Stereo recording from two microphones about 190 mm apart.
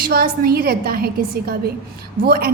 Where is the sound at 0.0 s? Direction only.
50° right (ahead or behind).